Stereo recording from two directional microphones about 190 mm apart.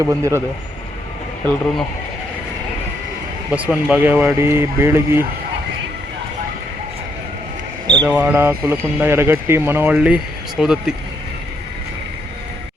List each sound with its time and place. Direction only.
0.0 s speech: 15° right (ahead or behind)
1.5 s speech: centre (ahead or behind)
3.5 s speech: 5° right (ahead or behind)
7.9 s a sound: 20° right (ahead or behind)
8.1 s speech: 10° right (ahead or behind)